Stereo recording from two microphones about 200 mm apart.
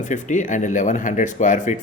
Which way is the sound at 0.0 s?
40° left (ahead or behind).